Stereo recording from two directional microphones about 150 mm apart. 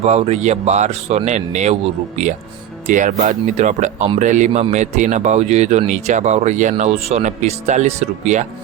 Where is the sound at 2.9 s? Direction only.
60° right (ahead or behind).